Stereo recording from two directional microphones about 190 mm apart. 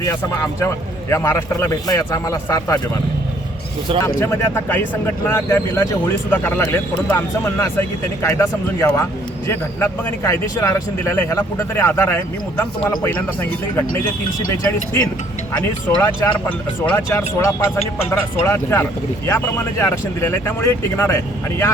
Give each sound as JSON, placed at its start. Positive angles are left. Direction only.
{"t": 0.0, "sound": "speech", "side_deg": 15}
{"t": 4.0, "sound": "speech", "side_deg": 15}
{"t": 15.5, "sound": "speech", "side_deg": 10}